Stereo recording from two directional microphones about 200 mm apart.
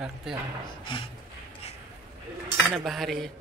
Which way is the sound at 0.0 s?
Centre (ahead or behind).